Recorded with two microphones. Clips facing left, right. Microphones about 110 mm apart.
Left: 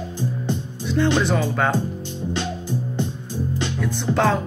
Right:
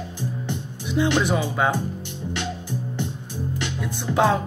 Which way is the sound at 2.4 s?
20° left (ahead or behind).